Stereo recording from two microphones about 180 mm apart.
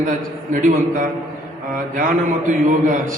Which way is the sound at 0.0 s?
45° right (ahead or behind).